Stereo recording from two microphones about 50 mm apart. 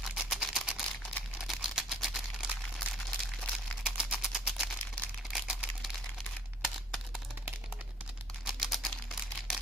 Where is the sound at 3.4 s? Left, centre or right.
Left.